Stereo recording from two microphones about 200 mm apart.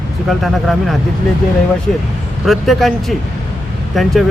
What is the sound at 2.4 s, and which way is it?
Speech, centre (ahead or behind).